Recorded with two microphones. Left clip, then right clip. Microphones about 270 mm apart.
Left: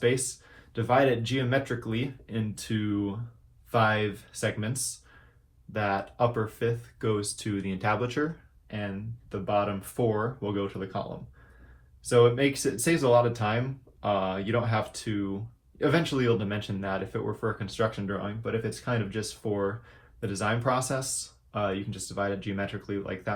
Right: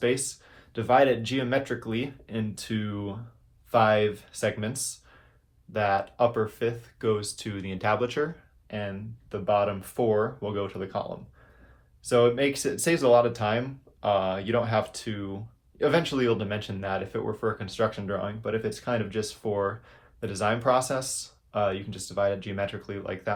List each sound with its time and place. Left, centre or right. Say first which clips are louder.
0.0 s speech: even; right
9.3 s speech: right 3 dB; right
12.0 s speech: even; right